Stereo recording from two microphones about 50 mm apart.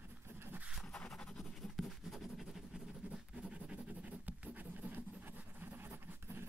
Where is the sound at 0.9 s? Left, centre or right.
Centre.